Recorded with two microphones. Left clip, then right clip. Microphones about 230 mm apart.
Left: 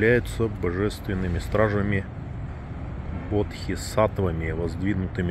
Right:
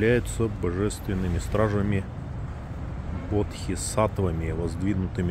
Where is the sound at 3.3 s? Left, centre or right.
Centre.